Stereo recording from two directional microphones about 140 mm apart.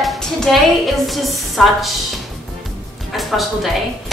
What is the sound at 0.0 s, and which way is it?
A woman's voice, centre (ahead or behind).